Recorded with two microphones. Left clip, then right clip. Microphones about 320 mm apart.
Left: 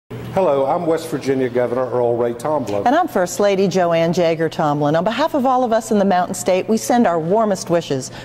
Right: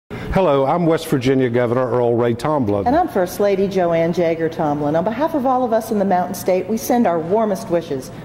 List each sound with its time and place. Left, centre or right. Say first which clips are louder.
0.3 s a man's voice: even; right
2.8 s speech: left 4 dB; left